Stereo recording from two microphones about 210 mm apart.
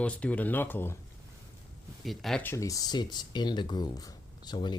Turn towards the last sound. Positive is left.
turn(degrees=20)  # may be behind; listen again after turning